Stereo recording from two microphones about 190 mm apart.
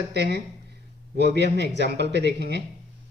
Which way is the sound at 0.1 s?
60° right (ahead or behind).